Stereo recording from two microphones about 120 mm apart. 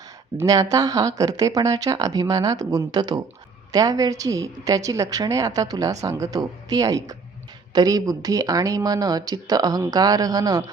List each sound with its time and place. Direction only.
0.4 s a woman's voice: 30° right (ahead or behind)